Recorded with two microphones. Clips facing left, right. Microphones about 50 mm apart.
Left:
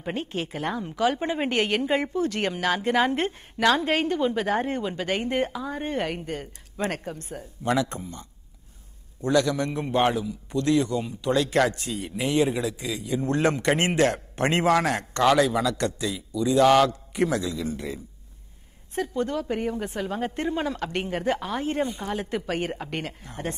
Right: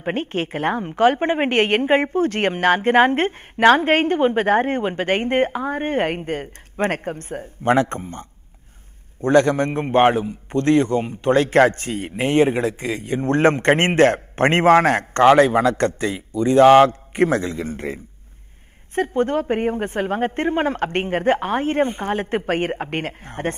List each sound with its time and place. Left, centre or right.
0.0 s a man's voice: right